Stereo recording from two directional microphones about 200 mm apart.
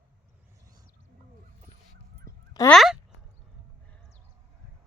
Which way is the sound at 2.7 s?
Centre (ahead or behind).